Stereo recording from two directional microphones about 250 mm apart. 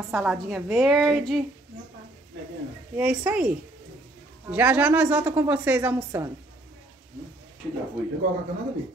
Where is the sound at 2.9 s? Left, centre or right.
Centre.